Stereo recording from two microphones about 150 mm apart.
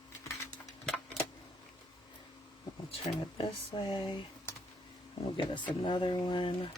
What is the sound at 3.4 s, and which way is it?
Speech, 35° left (ahead or behind).